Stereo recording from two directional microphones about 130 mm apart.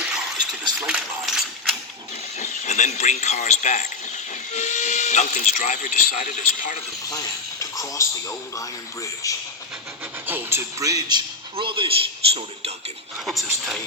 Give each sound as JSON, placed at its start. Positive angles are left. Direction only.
{"t": 0.8, "sound": "a sound", "side_deg": -5}
{"t": 2.4, "sound": "a man's voice", "side_deg": 65}
{"t": 7.6, "sound": "speech", "side_deg": 25}
{"t": 10.2, "sound": "speech", "side_deg": -15}
{"t": 11.5, "sound": "a man's voice", "side_deg": -40}
{"t": 13.1, "sound": "speech", "side_deg": -5}